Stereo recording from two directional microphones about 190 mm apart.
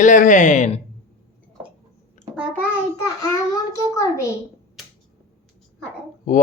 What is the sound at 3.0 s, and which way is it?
A child's voice, 20° left (ahead or behind).